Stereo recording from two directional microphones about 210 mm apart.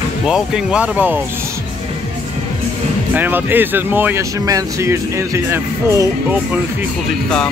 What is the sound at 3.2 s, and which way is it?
Speech, 10° right (ahead or behind).